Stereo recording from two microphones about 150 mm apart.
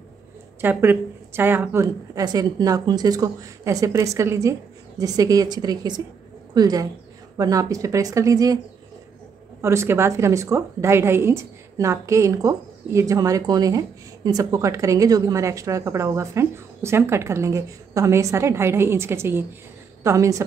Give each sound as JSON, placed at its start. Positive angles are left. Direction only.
{"t": 0.6, "sound": "a woman's voice", "side_deg": -15}
{"t": 9.6, "sound": "a woman's voice", "side_deg": -20}